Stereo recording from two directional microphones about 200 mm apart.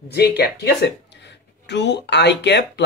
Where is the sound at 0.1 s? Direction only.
55° left (ahead or behind).